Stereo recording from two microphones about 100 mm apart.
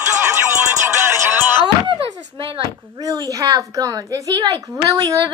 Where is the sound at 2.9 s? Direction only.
35° right (ahead or behind).